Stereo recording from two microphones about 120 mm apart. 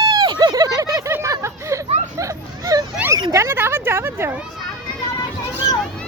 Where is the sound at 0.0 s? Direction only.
30° right (ahead or behind).